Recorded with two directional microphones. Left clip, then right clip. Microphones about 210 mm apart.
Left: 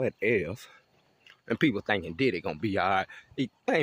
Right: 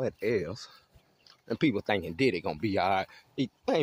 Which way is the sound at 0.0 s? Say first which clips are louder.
Left 3 dB; 30° left (ahead or behind).